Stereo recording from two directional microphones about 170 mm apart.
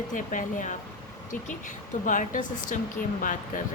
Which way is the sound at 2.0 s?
50° left (ahead or behind).